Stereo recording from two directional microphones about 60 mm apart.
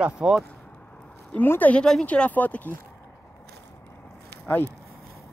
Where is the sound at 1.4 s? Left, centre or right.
Left.